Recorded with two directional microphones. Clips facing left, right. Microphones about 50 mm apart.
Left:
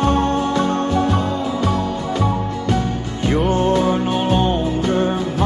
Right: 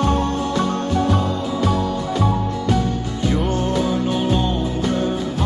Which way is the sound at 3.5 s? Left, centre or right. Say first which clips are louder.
Left 4 dB; left.